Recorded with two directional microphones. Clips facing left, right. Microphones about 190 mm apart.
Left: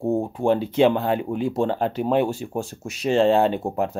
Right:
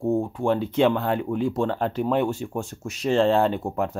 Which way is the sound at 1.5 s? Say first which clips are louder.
Left 2 dB; 30° left (ahead or behind).